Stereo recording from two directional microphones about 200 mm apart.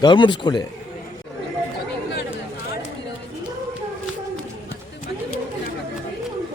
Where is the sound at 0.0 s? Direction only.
25° left (ahead or behind).